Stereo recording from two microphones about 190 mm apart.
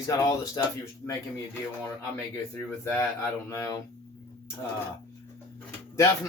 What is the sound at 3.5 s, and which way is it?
Speech, 15° left (ahead or behind).